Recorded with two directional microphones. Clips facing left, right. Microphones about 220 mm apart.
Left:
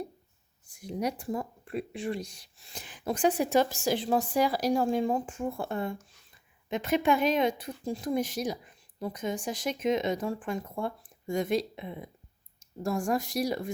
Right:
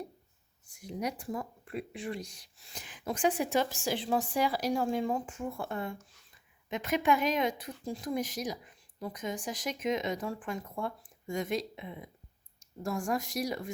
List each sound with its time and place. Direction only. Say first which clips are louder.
0.7 s speech: left 4 dB; 30° left (ahead or behind)